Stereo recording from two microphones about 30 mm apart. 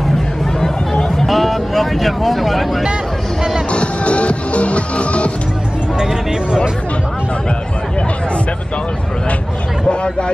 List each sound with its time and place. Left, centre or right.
1.2 s vehicle: centre
3.7 s music: left
9.8 s speech: left